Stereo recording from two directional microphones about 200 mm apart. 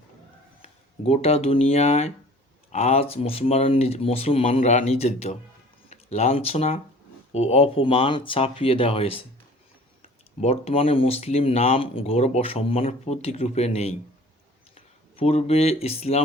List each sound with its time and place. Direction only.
0.6 s speech: 30° left (ahead or behind)
10.4 s speech: 30° left (ahead or behind)